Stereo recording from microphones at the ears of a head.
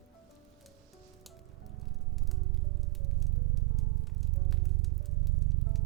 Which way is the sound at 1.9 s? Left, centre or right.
Right.